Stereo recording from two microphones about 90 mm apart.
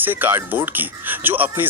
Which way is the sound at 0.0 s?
20° right (ahead or behind).